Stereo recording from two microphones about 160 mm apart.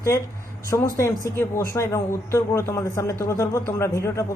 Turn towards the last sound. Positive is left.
turn(degrees=15)  # may be behind; listen again after turning